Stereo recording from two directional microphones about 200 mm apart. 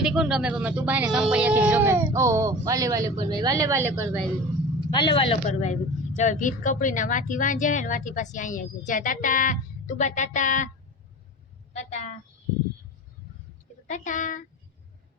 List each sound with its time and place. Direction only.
0.0 s speech: 5° right (ahead or behind)
4.9 s speech: 20° left (ahead or behind)
5.5 s speech: 35° left (ahead or behind)
11.7 s a woman's voice: 35° left (ahead or behind)
13.8 s speech: 40° left (ahead or behind)